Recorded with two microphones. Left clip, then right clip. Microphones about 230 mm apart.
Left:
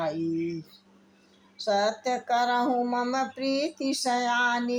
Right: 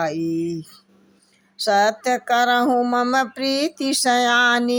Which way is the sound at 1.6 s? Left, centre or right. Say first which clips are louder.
Right 8 dB; centre.